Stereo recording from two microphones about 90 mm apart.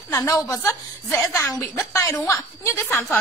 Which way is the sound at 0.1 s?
30° left (ahead or behind).